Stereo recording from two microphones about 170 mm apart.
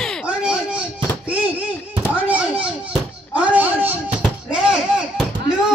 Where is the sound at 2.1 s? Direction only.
10° right (ahead or behind).